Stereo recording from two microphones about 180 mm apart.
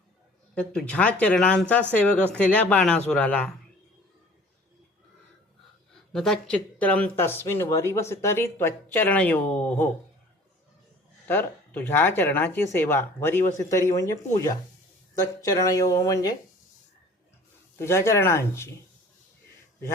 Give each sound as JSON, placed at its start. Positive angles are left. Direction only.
{"t": 0.5, "sound": "speech", "side_deg": 5}
{"t": 6.1, "sound": "speech", "side_deg": 5}
{"t": 11.3, "sound": "speech", "side_deg": 10}
{"t": 17.7, "sound": "speech", "side_deg": 15}